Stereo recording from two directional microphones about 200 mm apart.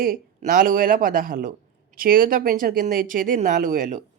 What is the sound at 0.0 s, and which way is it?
Speech, 45° right (ahead or behind).